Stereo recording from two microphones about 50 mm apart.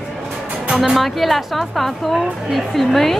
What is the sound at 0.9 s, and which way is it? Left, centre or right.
A woman's voice, centre.